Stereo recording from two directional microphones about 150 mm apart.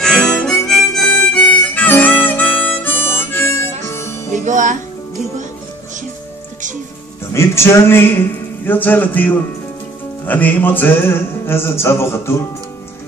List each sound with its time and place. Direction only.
0.0 s harmonica: 5° left (ahead or behind)
4.5 s music: 55° right (ahead or behind)
7.3 s music: 20° left (ahead or behind)